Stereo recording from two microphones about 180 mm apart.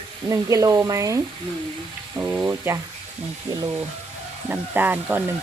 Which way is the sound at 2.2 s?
10° right (ahead or behind).